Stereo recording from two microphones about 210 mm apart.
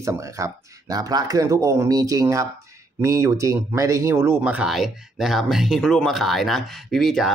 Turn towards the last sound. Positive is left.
turn(degrees=0)  # may be behind; listen again after turning